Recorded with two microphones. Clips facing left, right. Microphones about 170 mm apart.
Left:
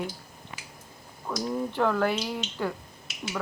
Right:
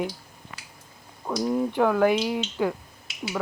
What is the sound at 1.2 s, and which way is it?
Speech, 15° right (ahead or behind).